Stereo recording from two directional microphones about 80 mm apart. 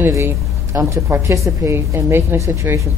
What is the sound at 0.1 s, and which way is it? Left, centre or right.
A woman's voice, right.